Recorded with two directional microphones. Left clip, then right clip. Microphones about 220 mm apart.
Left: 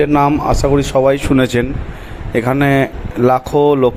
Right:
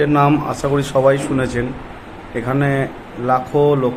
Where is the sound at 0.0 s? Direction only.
25° left (ahead or behind).